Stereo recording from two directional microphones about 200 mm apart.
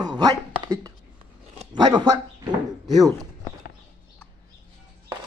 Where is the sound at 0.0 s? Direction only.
20° right (ahead or behind).